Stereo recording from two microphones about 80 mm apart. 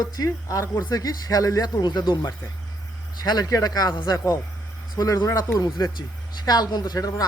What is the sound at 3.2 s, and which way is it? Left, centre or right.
Speech, left.